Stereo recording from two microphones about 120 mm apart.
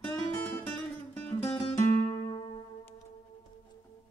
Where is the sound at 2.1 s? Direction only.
45° left (ahead or behind).